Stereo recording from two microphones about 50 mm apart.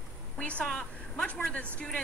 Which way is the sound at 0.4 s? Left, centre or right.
Left.